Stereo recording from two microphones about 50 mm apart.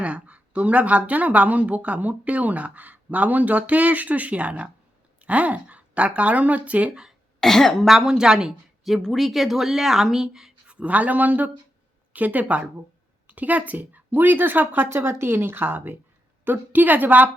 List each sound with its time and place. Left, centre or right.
0.0 s a woman's voice: right
7.3 s speech: centre
7.9 s speech: centre
9.1 s speech: centre
10.8 s a woman's voice: right
14.8 s a woman's voice: right